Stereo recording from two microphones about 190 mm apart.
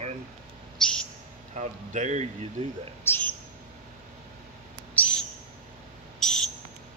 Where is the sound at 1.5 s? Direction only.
40° right (ahead or behind).